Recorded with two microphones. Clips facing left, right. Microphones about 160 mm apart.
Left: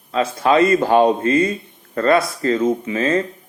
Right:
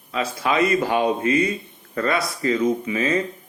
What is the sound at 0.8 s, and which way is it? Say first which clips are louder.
Speech: left 6 dB; 35° left (ahead or behind).